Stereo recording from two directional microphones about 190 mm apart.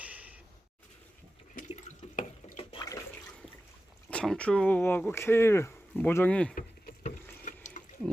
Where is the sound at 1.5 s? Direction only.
40° left (ahead or behind).